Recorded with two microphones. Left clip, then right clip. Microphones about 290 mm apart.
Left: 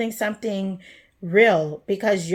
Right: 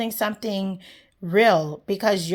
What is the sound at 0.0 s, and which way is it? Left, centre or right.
A woman's voice, right.